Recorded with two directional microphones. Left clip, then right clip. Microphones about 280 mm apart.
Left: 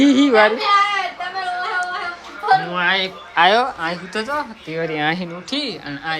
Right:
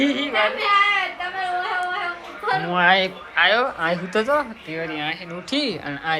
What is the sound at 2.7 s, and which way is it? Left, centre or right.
Speech, centre.